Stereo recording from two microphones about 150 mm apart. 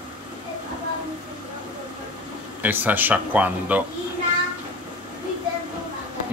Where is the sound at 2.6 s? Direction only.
10° right (ahead or behind).